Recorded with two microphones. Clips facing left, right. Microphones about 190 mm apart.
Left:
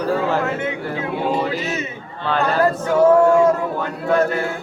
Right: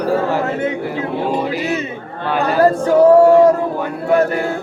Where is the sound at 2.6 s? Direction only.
35° right (ahead or behind).